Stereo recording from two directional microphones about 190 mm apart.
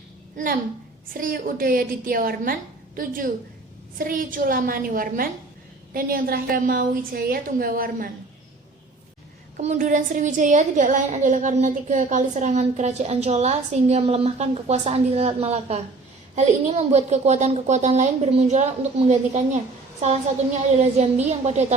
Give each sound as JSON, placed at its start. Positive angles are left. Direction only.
{"t": 1.1, "sound": "a woman's voice", "side_deg": -45}
{"t": 9.6, "sound": "a woman's voice", "side_deg": -40}